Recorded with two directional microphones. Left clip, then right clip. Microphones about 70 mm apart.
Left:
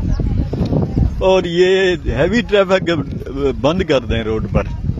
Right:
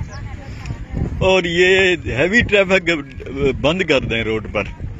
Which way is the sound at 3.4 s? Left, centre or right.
Centre.